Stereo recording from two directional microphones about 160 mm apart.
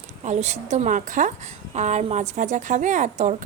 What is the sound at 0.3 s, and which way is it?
A woman's voice, 45° right (ahead or behind).